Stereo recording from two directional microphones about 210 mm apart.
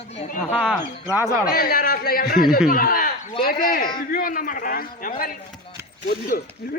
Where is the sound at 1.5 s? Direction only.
45° left (ahead or behind).